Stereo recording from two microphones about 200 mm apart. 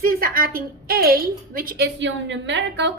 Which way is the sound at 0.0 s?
45° right (ahead or behind).